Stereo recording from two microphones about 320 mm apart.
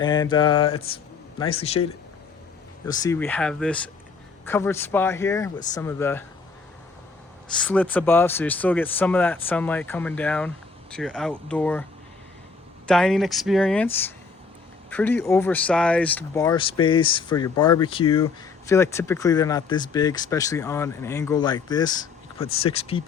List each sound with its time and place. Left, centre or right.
0.0 s speech: centre
2.8 s speech: centre
7.7 s speech: centre
12.9 s speech: centre